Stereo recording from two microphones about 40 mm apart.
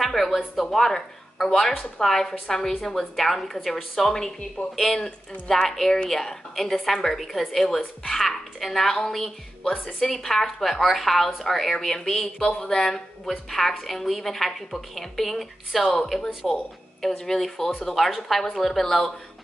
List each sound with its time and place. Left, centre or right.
0.0 s a woman's voice: centre
9.6 s speech: left
9.9 s a woman's voice: centre